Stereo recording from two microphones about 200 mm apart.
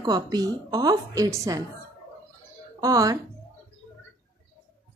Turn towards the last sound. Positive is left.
turn(degrees=-15)  # may be behind; listen again after turning